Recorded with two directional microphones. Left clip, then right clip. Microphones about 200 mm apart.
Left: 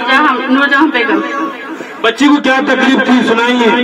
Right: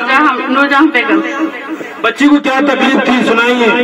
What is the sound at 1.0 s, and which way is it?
Speech, 30° right (ahead or behind).